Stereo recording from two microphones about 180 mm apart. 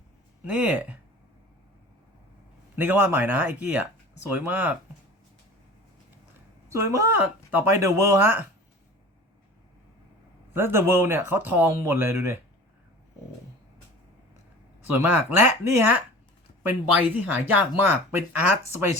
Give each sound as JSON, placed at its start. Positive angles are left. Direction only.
{"t": 0.4, "sound": "speech", "side_deg": -5}
{"t": 2.7, "sound": "speech", "side_deg": -10}
{"t": 6.7, "sound": "speech", "side_deg": -15}
{"t": 10.5, "sound": "speech", "side_deg": -15}
{"t": 14.8, "sound": "speech", "side_deg": -10}